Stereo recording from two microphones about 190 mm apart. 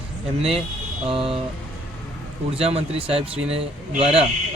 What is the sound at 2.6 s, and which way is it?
Speech, 30° right (ahead or behind).